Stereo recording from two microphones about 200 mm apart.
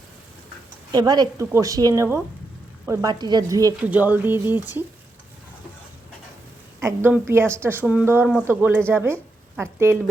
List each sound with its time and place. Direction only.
0.9 s speech: 20° right (ahead or behind)
6.7 s speech: 10° right (ahead or behind)